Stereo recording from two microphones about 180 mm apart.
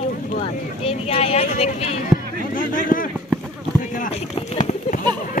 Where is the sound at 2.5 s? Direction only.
50° left (ahead or behind).